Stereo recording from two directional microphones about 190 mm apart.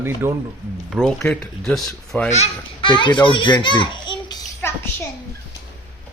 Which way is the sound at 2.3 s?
35° left (ahead or behind).